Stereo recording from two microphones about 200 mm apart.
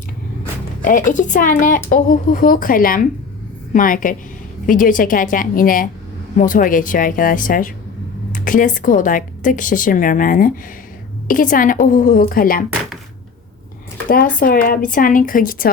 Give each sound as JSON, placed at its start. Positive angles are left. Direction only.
{"t": 0.8, "sound": "a woman's voice", "side_deg": 40}
{"t": 14.1, "sound": "speech", "side_deg": 45}